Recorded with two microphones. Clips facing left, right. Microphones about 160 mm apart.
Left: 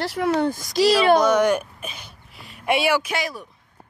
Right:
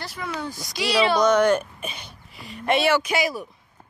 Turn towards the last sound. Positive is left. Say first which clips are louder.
# right 3 dB
turn(degrees=-5)  # may be behind; listen again after turning